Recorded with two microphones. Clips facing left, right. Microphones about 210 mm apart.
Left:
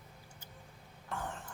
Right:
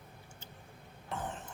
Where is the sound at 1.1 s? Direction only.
20° right (ahead or behind).